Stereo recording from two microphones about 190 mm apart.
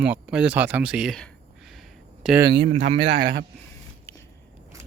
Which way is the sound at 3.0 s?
60° right (ahead or behind).